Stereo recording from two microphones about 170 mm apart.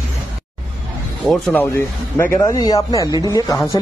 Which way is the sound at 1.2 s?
5° left (ahead or behind).